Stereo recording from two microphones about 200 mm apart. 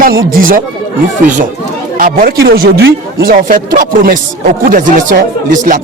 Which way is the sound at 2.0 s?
45° right (ahead or behind).